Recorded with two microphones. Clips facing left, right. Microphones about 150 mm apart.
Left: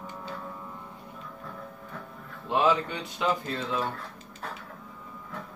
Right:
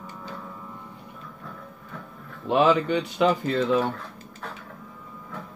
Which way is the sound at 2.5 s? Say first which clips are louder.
Right 5 dB; 70° right (ahead or behind).